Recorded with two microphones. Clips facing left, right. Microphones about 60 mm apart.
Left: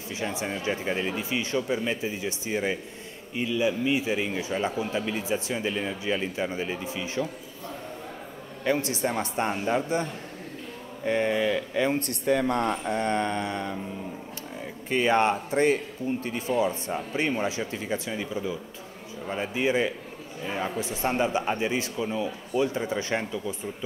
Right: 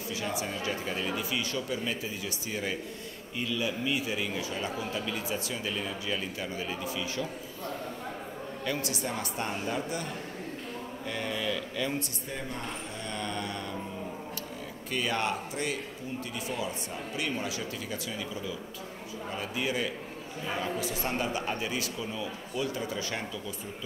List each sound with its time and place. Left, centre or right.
0.1 s a man's voice: left
8.6 s a man's voice: left
11.1 s a man's voice: left
12.0 s speech: left
13.0 s a man's voice: left
14.9 s a man's voice: left